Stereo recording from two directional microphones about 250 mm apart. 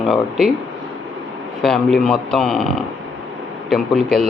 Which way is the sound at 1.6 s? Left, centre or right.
Centre.